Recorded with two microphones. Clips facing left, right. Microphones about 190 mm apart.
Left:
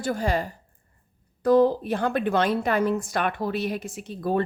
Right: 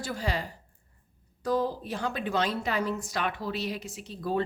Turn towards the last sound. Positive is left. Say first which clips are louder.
# left 4 dB
turn(degrees=55)  # may be behind; listen again after turning